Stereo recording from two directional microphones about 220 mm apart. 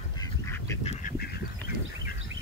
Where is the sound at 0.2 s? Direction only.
15° left (ahead or behind).